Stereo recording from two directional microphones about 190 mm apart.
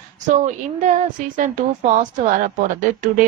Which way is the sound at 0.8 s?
45° right (ahead or behind).